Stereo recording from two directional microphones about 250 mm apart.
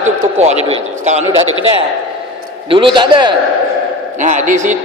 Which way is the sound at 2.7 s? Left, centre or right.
Centre.